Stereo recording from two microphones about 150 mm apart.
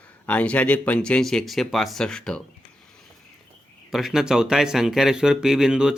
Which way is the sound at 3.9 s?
Centre (ahead or behind).